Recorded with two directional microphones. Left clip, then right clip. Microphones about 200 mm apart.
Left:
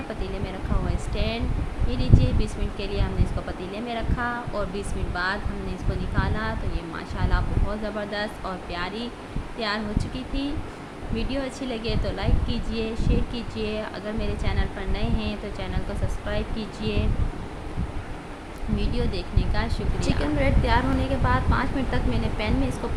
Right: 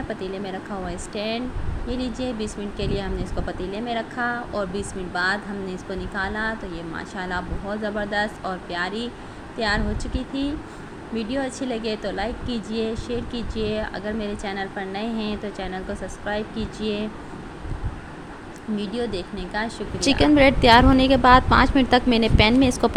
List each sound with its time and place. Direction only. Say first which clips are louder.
1.1 s speech: right 3 dB; 20° right (ahead or behind)
18.8 s speech: right 4 dB; 15° right (ahead or behind)
20.0 s a woman's voice: right 10 dB; 45° right (ahead or behind)